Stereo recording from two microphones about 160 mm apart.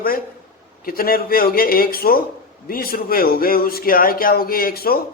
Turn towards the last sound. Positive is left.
turn(degrees=70)  # may be behind; listen again after turning